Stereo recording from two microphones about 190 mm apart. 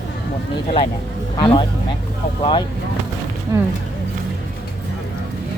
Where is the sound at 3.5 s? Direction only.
15° right (ahead or behind).